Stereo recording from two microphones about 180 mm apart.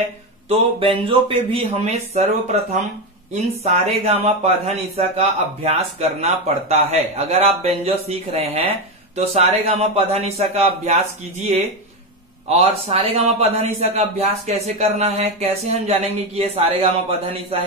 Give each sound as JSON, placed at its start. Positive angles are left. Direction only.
{"t": 0.5, "sound": "a man's voice", "side_deg": -30}